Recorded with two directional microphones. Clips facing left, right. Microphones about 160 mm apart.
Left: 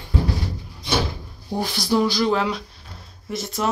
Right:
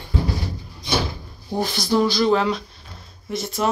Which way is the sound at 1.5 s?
10° left (ahead or behind).